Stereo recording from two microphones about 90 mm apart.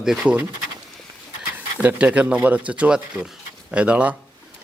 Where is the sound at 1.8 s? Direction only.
15° right (ahead or behind).